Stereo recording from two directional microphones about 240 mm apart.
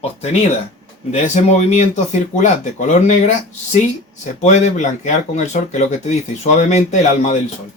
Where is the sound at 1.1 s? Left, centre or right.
Left.